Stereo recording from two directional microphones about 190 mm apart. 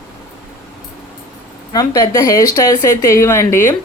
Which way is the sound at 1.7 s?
20° left (ahead or behind).